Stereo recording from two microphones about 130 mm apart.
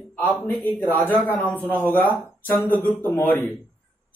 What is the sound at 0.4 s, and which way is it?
A man's voice, 15° left (ahead or behind).